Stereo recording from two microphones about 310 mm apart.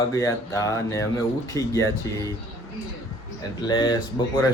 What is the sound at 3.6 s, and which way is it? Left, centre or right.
Speech, centre.